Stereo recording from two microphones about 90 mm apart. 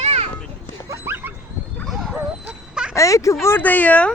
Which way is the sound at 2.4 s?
10° right (ahead or behind).